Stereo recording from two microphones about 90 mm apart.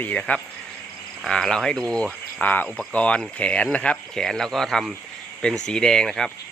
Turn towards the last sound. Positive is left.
turn(degrees=5)  # may be behind; listen again after turning